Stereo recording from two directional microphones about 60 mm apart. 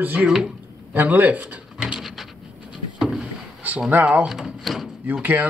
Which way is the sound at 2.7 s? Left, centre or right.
Centre.